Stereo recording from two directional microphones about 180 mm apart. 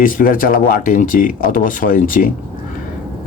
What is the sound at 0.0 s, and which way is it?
Speech, 50° left (ahead or behind).